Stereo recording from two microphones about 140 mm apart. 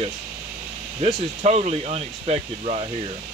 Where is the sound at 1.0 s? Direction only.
50° right (ahead or behind).